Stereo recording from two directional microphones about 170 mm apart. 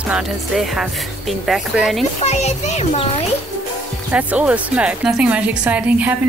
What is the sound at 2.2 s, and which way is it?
Speech, 40° left (ahead or behind).